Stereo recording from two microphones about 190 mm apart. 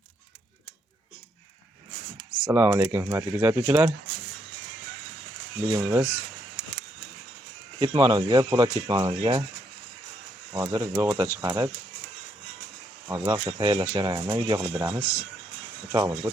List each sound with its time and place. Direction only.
2.3 s speech: 5° right (ahead or behind)
5.7 s speech: 5° right (ahead or behind)
7.8 s speech: 25° right (ahead or behind)
10.5 s speech: 15° right (ahead or behind)
13.1 s speech: 15° right (ahead or behind)
15.0 s speech: 15° left (ahead or behind)
15.9 s speech: 15° right (ahead or behind)